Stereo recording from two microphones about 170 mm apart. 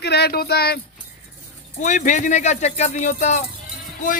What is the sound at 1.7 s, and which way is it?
A man's voice, 45° left (ahead or behind).